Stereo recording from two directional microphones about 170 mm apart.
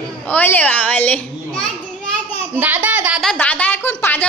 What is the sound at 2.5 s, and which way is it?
Speech, 10° right (ahead or behind).